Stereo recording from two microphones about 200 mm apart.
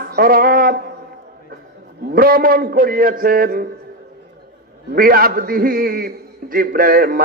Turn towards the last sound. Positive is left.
turn(degrees=-45)  # may be behind; listen again after turning